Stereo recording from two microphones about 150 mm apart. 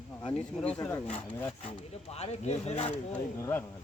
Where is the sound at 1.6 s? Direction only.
45° left (ahead or behind).